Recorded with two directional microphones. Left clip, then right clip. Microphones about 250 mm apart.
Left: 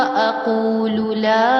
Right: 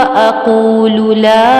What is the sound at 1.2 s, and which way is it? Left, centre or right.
Mantra, right.